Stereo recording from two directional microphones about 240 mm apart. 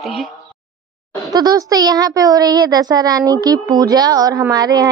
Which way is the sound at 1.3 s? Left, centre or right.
Centre.